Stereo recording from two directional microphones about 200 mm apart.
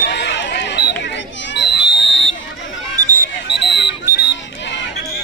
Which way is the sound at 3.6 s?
60° left (ahead or behind).